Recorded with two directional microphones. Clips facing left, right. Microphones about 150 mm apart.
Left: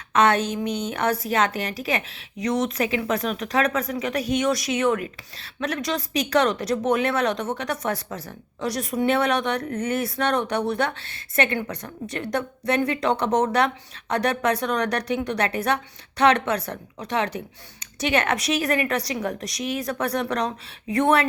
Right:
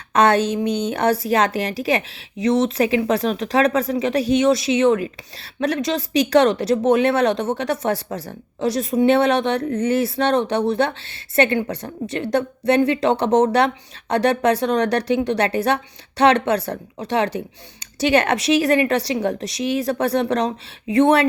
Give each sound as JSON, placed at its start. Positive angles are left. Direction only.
{"t": 0.1, "sound": "a woman's voice", "side_deg": -35}